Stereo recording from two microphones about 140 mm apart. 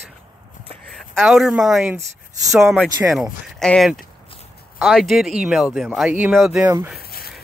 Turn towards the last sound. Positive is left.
turn(degrees=90)